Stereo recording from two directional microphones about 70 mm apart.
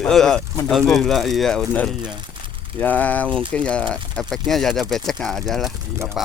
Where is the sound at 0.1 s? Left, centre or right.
Centre.